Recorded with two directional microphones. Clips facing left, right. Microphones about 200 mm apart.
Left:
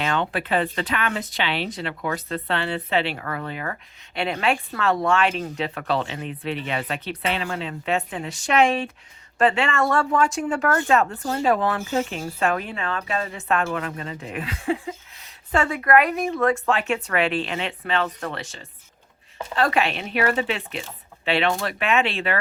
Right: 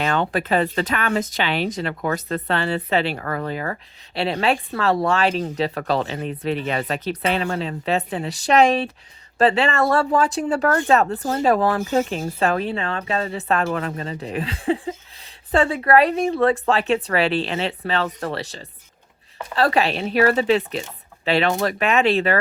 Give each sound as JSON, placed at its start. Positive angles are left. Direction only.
{"t": 0.0, "sound": "speech", "side_deg": -40}